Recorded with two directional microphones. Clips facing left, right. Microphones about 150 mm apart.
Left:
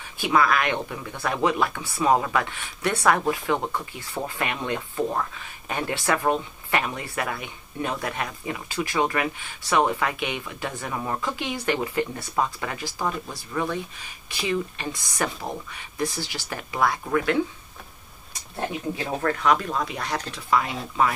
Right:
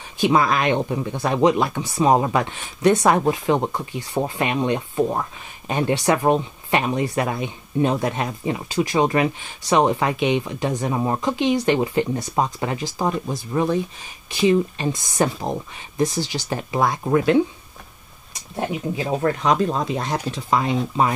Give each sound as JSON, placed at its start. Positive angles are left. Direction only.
{"t": 0.2, "sound": "speech", "side_deg": -25}
{"t": 18.6, "sound": "speech", "side_deg": -20}